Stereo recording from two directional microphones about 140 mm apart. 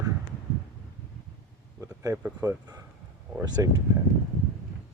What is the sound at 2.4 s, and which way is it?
Speech, 25° right (ahead or behind).